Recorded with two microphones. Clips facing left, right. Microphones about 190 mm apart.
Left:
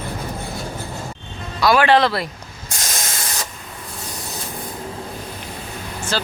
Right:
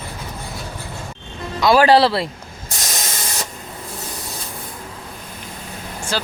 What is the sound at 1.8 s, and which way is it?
Speech, 35° right (ahead or behind).